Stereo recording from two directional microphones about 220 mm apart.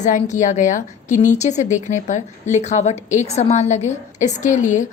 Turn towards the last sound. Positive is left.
turn(degrees=35)  # may be behind; listen again after turning